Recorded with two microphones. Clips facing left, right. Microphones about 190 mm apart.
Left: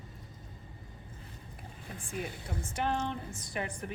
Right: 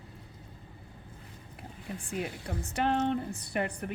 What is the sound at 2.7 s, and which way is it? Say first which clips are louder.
Speech: right 5 dB; 65° right (ahead or behind).